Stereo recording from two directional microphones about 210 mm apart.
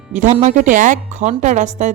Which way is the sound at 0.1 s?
35° right (ahead or behind).